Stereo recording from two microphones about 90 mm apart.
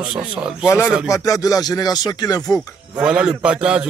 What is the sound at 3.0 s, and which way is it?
Speech, 10° right (ahead or behind).